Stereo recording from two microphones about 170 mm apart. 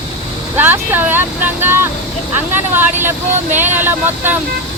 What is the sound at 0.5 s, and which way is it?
Speech, 10° right (ahead or behind).